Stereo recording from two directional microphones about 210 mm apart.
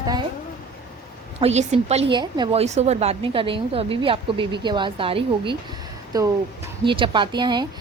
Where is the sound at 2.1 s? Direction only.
20° right (ahead or behind).